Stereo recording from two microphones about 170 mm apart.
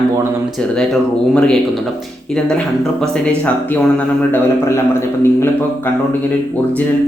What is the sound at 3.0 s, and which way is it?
A man's voice, 5° left (ahead or behind).